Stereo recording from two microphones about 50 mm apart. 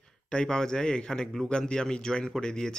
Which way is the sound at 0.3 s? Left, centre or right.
Centre.